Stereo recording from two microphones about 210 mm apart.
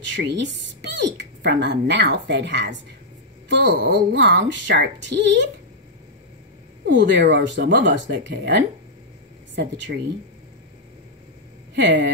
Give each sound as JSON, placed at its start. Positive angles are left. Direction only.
{"t": 0.1, "sound": "speech", "side_deg": -60}
{"t": 6.9, "sound": "speech", "side_deg": -55}
{"t": 11.7, "sound": "speech", "side_deg": -55}